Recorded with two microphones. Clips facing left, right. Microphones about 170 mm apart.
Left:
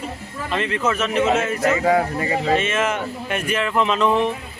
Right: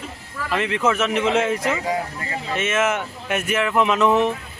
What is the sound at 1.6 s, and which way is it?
Speech, 70° left (ahead or behind).